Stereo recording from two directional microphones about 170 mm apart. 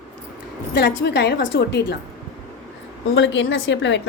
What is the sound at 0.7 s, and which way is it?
A woman's voice, 90° left.